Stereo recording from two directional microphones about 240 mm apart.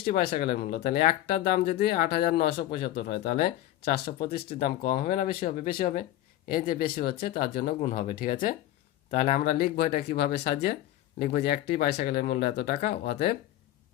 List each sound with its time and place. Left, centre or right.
0.0 s speech: left
4.4 s speech: left
4.9 s speech: left
9.0 s speech: left
9.3 s speech: left